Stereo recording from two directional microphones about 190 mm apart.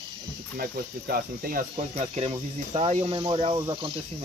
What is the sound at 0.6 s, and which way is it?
Speech, 50° right (ahead or behind).